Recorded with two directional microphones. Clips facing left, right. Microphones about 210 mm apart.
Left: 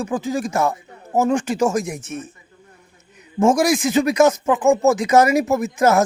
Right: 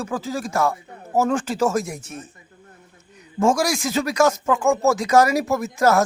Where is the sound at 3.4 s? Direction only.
20° left (ahead or behind).